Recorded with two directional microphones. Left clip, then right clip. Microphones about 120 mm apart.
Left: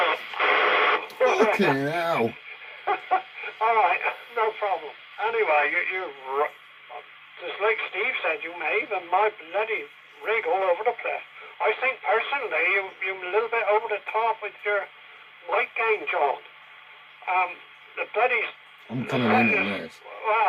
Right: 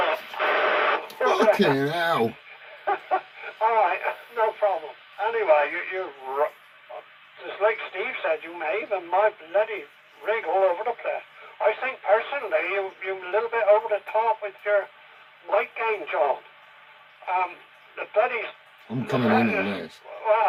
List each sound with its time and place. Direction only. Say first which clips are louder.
0.0 s radio: left 1 dB; 45° left (ahead or behind)
1.2 s a sound: left 1 dB; 35° left (ahead or behind)
2.8 s radio: left 1 dB; 45° left (ahead or behind)
5.1 s speech: right 2 dB; 45° left (ahead or behind)